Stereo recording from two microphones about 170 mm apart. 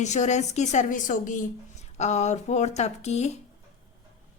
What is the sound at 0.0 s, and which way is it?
A woman's voice, 45° left (ahead or behind).